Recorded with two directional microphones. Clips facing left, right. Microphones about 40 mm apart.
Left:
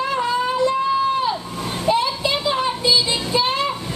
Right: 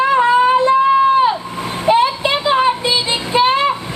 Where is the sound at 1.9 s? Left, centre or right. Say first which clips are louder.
Right 6 dB; right.